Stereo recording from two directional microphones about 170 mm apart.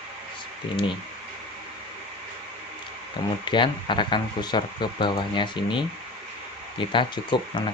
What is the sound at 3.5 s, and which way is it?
Speech, 30° left (ahead or behind).